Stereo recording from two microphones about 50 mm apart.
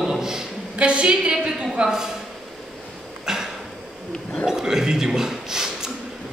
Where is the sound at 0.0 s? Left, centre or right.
Centre.